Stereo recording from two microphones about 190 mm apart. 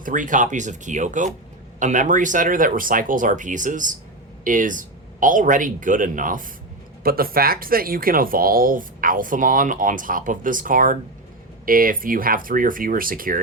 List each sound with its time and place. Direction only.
0.0 s speech: 45° right (ahead or behind)